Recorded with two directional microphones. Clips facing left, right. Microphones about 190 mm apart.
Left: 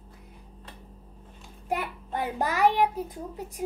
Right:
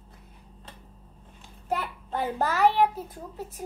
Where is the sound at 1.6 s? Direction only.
15° left (ahead or behind).